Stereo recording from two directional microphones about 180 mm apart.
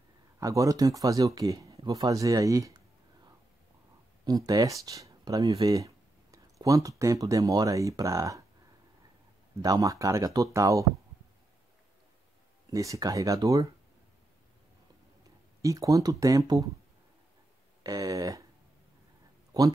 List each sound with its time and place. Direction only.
0.4 s speech: 20° right (ahead or behind)
4.2 s speech: 20° right (ahead or behind)
9.6 s speech: 20° right (ahead or behind)
12.7 s speech: 20° right (ahead or behind)
15.6 s speech: 20° right (ahead or behind)
17.8 s speech: 20° right (ahead or behind)